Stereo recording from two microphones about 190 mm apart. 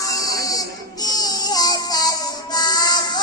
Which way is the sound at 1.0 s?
20° left (ahead or behind).